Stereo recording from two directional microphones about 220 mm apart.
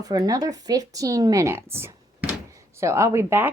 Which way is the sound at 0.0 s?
15° right (ahead or behind).